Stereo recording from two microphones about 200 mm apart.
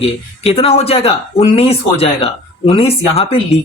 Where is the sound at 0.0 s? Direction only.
30° left (ahead or behind).